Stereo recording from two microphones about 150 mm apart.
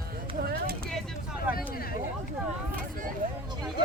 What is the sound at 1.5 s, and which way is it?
Speech, 80° left.